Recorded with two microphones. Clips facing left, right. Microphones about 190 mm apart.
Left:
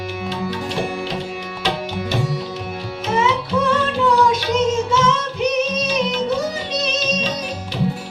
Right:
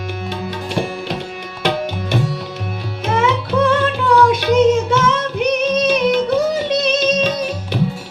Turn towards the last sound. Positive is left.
turn(degrees=-60)  # may be behind; listen again after turning